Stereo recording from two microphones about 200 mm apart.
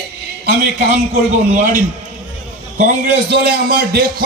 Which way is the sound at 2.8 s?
40° right (ahead or behind).